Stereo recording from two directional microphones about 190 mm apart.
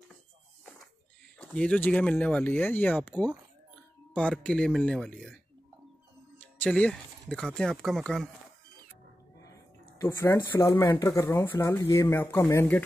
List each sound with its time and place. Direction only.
1.4 s speech: 5° left (ahead or behind)
10.0 s speech: 15° left (ahead or behind)
10.5 s speech: 25° left (ahead or behind)